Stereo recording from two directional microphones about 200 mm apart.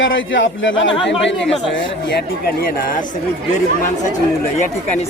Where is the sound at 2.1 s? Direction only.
50° left (ahead or behind).